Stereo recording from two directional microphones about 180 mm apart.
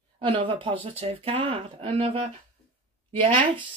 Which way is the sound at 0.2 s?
30° right (ahead or behind).